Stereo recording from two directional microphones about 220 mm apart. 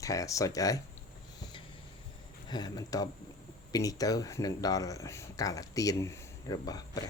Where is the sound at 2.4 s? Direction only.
20° left (ahead or behind).